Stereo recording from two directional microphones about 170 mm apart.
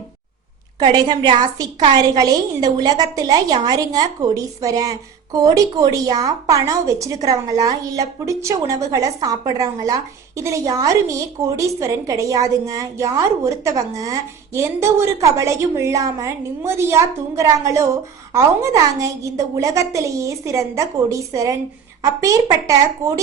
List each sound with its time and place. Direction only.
0.8 s a woman's voice: 25° right (ahead or behind)